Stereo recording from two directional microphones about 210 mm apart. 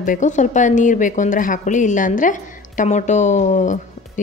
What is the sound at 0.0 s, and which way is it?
Speech, 35° left (ahead or behind).